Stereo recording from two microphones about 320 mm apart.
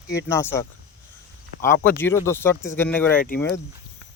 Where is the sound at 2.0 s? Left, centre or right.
Centre.